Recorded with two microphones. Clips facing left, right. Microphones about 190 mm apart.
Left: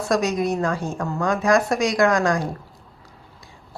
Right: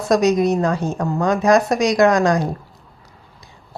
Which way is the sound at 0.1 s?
20° right (ahead or behind).